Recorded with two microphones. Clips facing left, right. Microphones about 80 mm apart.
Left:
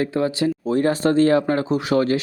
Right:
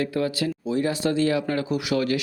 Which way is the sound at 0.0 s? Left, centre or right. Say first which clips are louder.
Left 4 dB; left.